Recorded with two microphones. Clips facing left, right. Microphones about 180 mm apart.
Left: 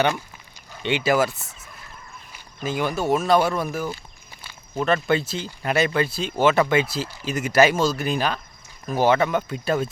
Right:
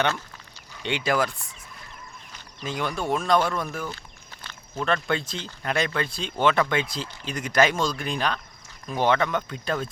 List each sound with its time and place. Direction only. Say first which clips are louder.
0.9 s speech: left 4 dB; 5° left (ahead or behind)